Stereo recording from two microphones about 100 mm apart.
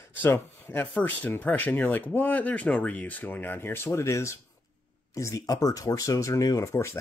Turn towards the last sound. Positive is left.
turn(degrees=30)  # may be behind; listen again after turning